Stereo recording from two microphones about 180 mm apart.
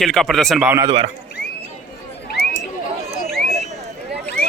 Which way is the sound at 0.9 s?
35° right (ahead or behind).